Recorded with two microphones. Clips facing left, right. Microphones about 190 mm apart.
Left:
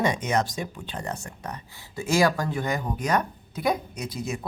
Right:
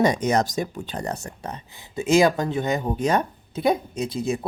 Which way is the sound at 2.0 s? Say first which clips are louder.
Right 4 dB; 20° right (ahead or behind).